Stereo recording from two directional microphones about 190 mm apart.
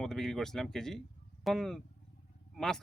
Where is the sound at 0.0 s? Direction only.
Centre (ahead or behind).